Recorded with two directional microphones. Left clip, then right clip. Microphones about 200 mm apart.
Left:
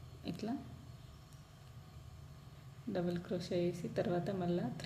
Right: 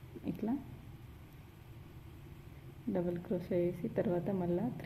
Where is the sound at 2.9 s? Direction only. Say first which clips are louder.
Right 2 dB; 30° right (ahead or behind).